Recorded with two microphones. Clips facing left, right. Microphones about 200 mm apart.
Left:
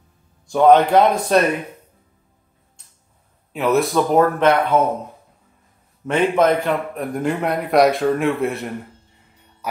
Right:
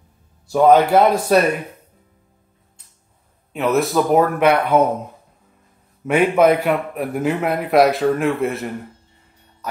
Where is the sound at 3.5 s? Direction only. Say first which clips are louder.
Even; centre (ahead or behind).